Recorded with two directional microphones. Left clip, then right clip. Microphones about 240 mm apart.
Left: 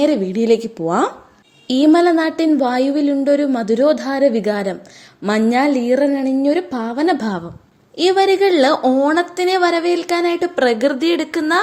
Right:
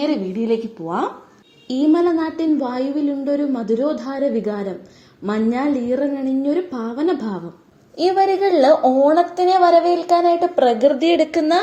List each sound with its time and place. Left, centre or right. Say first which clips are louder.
0.0 s a woman's voice: left 5 dB; left
8.0 s speech: left 2 dB; left
8.3 s a woman's voice: left 1 dB; left; by 11.6 s centre